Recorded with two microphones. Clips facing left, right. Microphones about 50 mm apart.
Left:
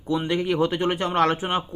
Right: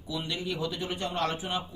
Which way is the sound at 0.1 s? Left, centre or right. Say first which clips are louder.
Left 10 dB; left.